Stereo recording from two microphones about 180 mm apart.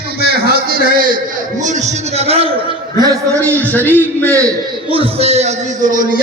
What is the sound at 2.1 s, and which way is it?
Speech, 35° right (ahead or behind).